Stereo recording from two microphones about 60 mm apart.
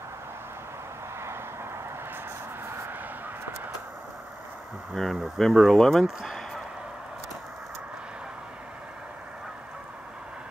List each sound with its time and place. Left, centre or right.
1.2 s vehicle: right
4.9 s speech: centre
6.0 s a sound: centre